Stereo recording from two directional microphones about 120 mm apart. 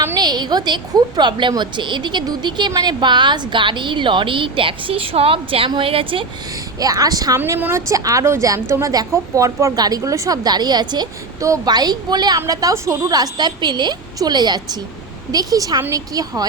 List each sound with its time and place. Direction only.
0.2 s a woman's voice: 35° right (ahead or behind)
6.7 s a woman's voice: 30° right (ahead or behind)